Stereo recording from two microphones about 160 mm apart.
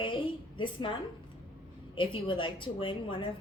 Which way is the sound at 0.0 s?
30° left (ahead or behind).